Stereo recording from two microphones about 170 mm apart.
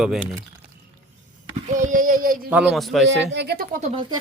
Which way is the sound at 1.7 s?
50° right (ahead or behind).